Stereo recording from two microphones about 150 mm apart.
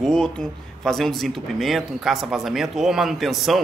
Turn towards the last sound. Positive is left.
turn(degrees=0)  # may be behind; listen again after turning